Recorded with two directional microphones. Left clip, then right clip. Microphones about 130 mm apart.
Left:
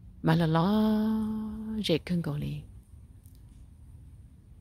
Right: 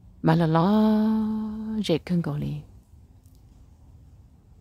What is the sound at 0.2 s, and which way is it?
Mantra, 30° right (ahead or behind).